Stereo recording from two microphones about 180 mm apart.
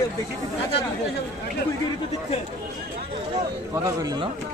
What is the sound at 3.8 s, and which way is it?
Speech, 20° right (ahead or behind).